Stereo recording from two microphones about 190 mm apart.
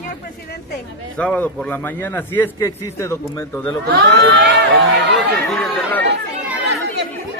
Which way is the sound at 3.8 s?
55° right (ahead or behind).